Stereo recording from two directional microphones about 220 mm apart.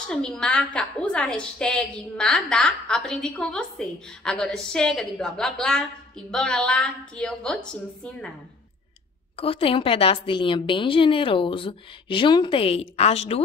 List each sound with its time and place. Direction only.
0.1 s a woman's voice: 5° left (ahead or behind)
9.4 s a woman's voice: 25° left (ahead or behind)